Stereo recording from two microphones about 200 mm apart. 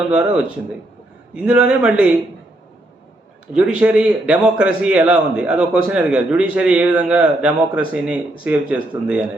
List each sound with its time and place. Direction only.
0.1 s a man's voice: 5° right (ahead or behind)
3.5 s a man's voice: 5° right (ahead or behind)